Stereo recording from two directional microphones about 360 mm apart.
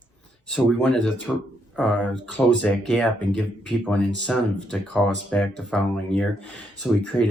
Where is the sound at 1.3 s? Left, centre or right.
Centre.